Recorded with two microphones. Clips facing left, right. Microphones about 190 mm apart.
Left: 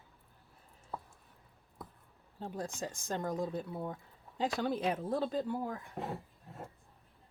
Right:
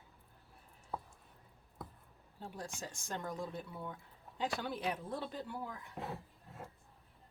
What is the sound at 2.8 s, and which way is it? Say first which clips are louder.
Speech: left 5 dB; 45° left (ahead or behind).